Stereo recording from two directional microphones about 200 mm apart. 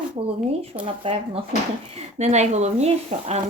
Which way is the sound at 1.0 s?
30° right (ahead or behind).